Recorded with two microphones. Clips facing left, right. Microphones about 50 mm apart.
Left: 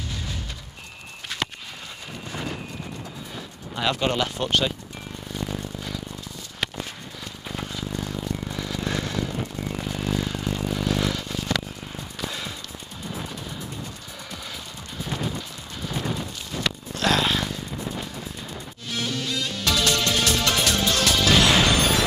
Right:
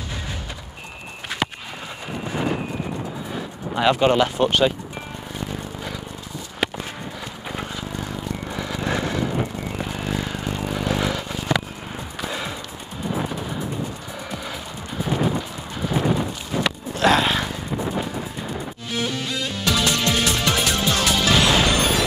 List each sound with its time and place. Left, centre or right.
1.3 s walk: centre
2.0 s a sound: centre
2.5 s cattle: right
6.6 s walk: centre
8.5 s vehicle: centre
12.2 s music: centre